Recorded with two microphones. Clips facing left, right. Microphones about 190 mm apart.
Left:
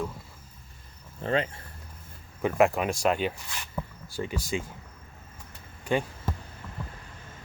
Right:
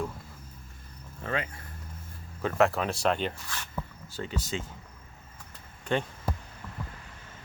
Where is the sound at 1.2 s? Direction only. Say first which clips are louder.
Left 5 dB; 30° left (ahead or behind).